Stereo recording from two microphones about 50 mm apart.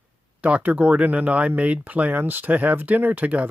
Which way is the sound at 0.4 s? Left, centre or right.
Right.